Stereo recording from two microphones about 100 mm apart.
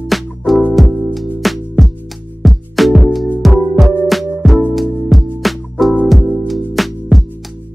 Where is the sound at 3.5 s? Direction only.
15° right (ahead or behind).